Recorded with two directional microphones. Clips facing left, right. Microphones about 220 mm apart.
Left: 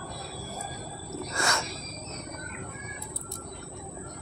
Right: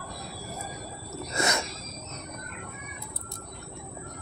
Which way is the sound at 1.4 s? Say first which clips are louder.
Right 3 dB; 20° right (ahead or behind).